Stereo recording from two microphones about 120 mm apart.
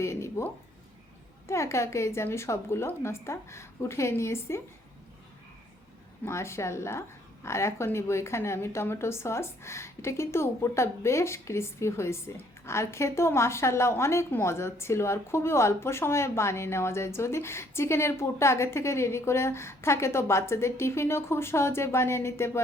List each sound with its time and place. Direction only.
0.0 s a sound: 25° left (ahead or behind)
1.5 s a woman's voice: 25° left (ahead or behind)
6.2 s a woman's voice: 25° left (ahead or behind)